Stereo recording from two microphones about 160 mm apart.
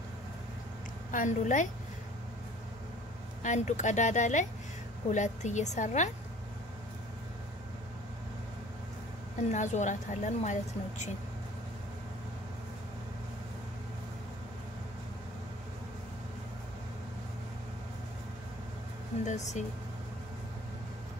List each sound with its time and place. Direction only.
1.1 s a woman's voice: 50° left (ahead or behind)
3.4 s a woman's voice: 50° left (ahead or behind)
9.5 s a woman's voice: 50° left (ahead or behind)
19.2 s a woman's voice: 45° left (ahead or behind)